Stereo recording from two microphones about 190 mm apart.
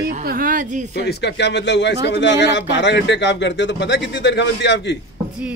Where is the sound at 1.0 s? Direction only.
60° left (ahead or behind).